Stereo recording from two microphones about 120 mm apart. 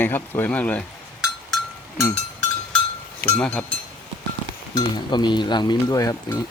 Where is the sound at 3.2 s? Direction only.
10° left (ahead or behind).